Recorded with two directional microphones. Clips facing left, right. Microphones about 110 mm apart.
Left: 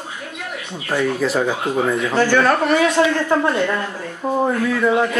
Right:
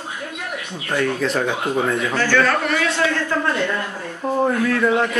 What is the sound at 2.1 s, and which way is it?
Speech, 15° left (ahead or behind).